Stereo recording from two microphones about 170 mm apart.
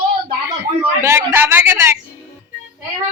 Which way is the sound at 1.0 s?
15° right (ahead or behind).